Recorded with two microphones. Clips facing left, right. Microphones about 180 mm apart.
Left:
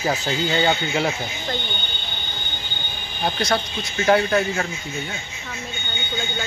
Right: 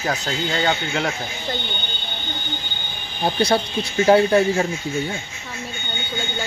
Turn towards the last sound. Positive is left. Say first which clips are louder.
# right 4 dB
turn(degrees=-30)  # may be behind; listen again after turning